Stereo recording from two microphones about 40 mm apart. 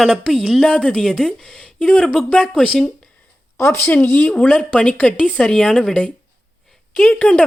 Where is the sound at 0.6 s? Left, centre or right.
Left.